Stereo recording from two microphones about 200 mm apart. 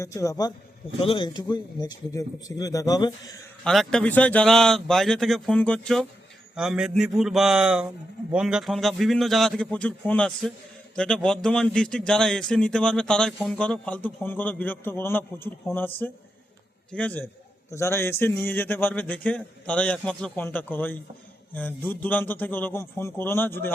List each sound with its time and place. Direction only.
0.0 s a man's voice: 15° left (ahead or behind)
3.6 s a man's voice: 5° left (ahead or behind)